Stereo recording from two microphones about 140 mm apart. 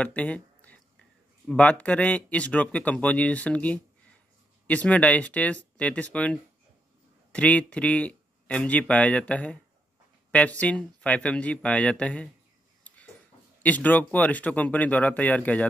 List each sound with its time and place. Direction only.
0.0 s speech: 10° left (ahead or behind)
7.3 s speech: 10° left (ahead or behind)
12.8 s a sound: 10° left (ahead or behind)
13.6 s speech: 10° left (ahead or behind)